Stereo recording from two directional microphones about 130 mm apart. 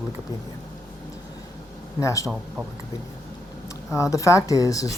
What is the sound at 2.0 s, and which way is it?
Speech, 25° left (ahead or behind).